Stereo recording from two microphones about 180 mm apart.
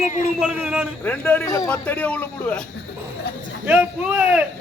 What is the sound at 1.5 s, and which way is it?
Speech, 20° left (ahead or behind).